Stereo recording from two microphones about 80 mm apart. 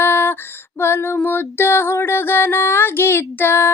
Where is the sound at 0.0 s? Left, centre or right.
Left.